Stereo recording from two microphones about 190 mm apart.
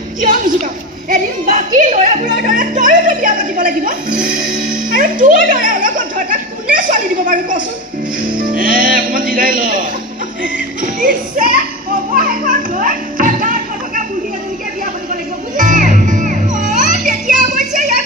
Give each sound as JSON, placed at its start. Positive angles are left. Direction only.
{"t": 1.1, "sound": "speech", "side_deg": -40}
{"t": 12.1, "sound": "children playing", "side_deg": -45}
{"t": 15.5, "sound": "music", "side_deg": -45}